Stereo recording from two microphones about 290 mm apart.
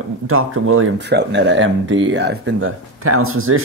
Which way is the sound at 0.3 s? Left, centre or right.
Right.